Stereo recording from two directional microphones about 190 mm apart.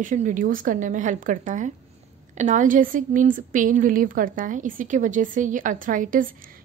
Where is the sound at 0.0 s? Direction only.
40° right (ahead or behind).